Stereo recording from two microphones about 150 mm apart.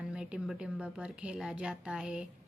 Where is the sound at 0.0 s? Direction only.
5° right (ahead or behind).